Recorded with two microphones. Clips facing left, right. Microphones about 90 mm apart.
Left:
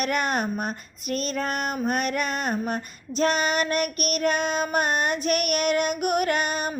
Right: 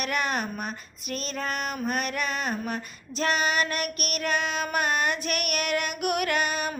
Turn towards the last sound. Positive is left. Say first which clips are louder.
# left 2 dB
turn(degrees=40)  # may be behind; listen again after turning